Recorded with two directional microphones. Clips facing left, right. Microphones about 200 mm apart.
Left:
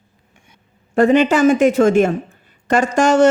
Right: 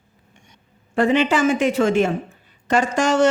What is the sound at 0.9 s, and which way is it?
A woman's voice, 45° left (ahead or behind).